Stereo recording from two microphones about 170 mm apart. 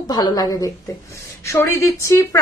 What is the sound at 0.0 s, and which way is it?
A woman's voice, 25° left (ahead or behind).